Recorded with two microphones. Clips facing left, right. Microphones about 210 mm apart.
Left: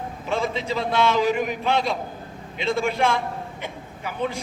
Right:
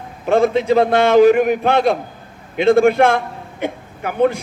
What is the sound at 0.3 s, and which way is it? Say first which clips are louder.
A man's voice: right 12 dB; 55° right (ahead or behind).